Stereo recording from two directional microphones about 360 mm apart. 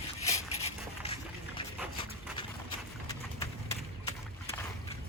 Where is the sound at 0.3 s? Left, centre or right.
Centre.